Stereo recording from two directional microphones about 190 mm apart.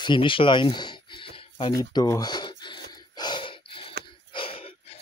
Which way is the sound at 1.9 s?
20° left (ahead or behind).